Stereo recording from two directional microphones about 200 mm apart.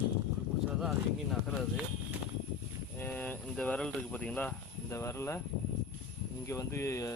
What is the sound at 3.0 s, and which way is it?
Speech, 10° left (ahead or behind).